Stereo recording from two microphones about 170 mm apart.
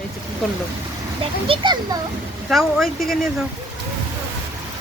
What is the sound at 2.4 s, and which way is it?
Speech, centre (ahead or behind).